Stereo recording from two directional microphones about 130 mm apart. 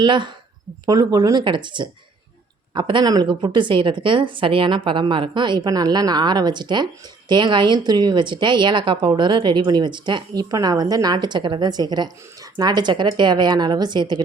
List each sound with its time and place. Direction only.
0.0 s speech: 35° right (ahead or behind)